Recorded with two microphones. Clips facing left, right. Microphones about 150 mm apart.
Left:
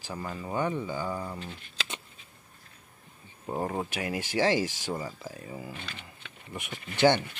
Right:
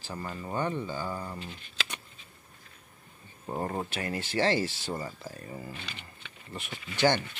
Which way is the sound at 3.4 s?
5° left (ahead or behind).